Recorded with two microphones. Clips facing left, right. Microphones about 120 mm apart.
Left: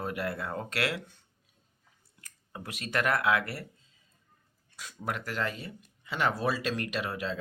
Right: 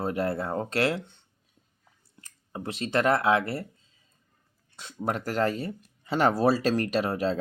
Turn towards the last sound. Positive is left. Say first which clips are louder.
# right 7 dB
turn(degrees=-35)  # may be behind; listen again after turning